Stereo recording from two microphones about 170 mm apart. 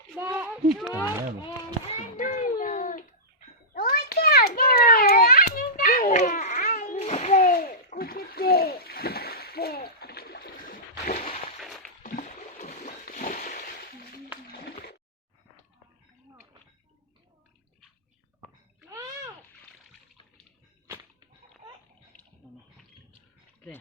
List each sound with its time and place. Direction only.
0.2 s speech: 10° right (ahead or behind)
1.9 s child singing: 50° left (ahead or behind)
3.8 s children playing: 65° left (ahead or behind); by 6.7 s 45° left (ahead or behind)
6.9 s splash: 40° left (ahead or behind)
12.0 s a sound: 45° left (ahead or behind)
18.9 s a sound: 15° right (ahead or behind)